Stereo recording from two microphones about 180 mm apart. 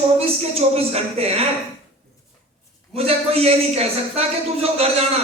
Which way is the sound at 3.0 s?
35° right (ahead or behind).